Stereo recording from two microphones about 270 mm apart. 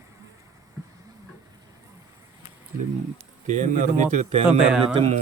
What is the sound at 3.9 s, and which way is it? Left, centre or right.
Speech, right.